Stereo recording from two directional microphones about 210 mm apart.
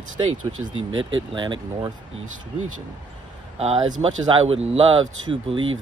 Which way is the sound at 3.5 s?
30° right (ahead or behind).